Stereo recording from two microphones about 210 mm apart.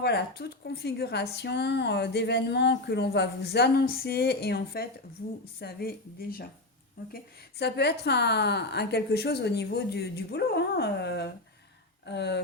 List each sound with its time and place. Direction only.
0.0 s speech: 50° left (ahead or behind)